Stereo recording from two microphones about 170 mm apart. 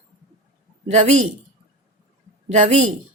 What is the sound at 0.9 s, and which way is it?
Speech, 40° right (ahead or behind).